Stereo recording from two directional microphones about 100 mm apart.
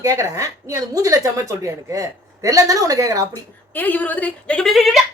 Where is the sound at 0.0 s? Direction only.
35° right (ahead or behind).